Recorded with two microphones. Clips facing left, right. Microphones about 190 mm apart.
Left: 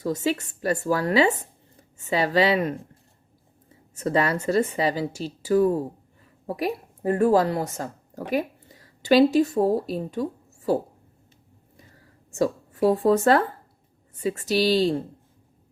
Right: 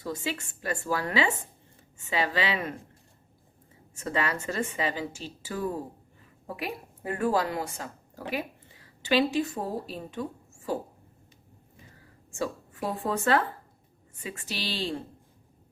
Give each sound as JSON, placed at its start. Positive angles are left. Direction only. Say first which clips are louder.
{"t": 0.0, "sound": "a woman's voice", "louder": "left 8 dB", "side_deg": 40}
{"t": 3.9, "sound": "a woman's voice", "louder": "left 7 dB", "side_deg": 40}
{"t": 12.3, "sound": "a woman's voice", "louder": "left 8 dB", "side_deg": 40}